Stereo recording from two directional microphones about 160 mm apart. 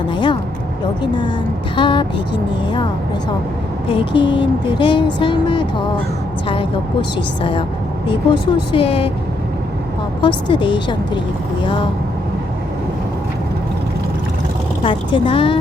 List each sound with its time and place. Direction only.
0.1 s a sound: 30° left (ahead or behind)
1.7 s speech: 30° left (ahead or behind)
3.8 s speech: 30° left (ahead or behind)
8.0 s speech: 30° left (ahead or behind)
10.2 s speech: 30° left (ahead or behind)
14.8 s speech: 35° left (ahead or behind)